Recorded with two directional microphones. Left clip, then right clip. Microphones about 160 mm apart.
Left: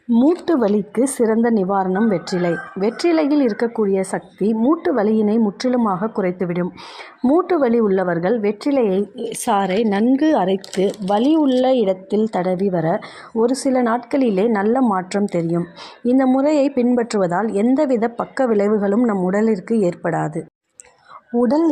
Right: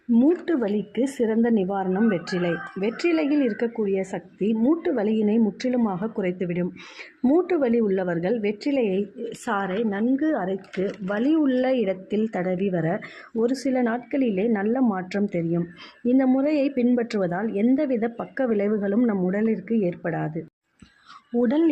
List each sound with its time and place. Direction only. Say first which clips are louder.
0.2 s a woman's voice: left 6 dB; 15° left (ahead or behind)
7.2 s speech: left 5 dB; centre (ahead or behind)
7.4 s a woman's voice: left 6 dB; 10° left (ahead or behind)
9.5 s speech: left 8 dB; 30° left (ahead or behind)
11.0 s a woman's voice: left 5 dB; 20° left (ahead or behind); by 19.3 s 5° left (ahead or behind)
19.3 s a woman's voice: left 7 dB; 15° left (ahead or behind)